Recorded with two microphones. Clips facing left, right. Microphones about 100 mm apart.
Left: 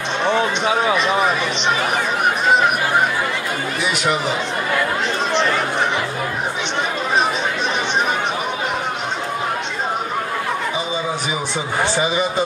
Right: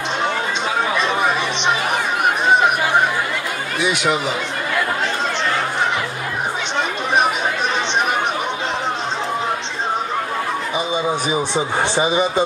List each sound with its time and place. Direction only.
11.5 s speech: 20° right (ahead or behind)